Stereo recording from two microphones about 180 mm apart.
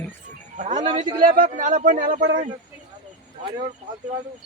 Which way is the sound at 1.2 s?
45° right (ahead or behind).